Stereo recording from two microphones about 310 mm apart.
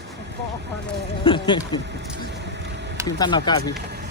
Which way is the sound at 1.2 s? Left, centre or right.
Centre.